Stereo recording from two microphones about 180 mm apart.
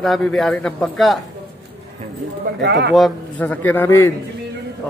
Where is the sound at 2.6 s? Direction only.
75° right (ahead or behind).